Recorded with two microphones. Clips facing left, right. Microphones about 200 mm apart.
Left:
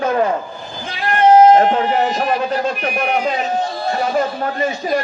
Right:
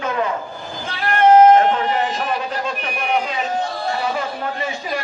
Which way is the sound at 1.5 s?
40° left (ahead or behind).